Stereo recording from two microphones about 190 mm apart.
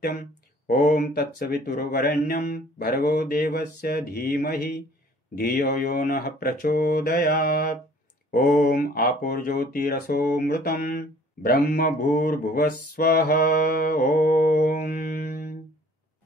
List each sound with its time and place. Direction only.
0.7 s speech: 50° left (ahead or behind)